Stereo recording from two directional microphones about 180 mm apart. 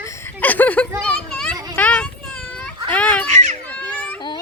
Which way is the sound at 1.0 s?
5° left (ahead or behind).